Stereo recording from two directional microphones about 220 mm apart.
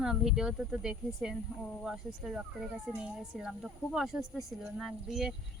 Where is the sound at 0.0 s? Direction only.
Centre (ahead or behind).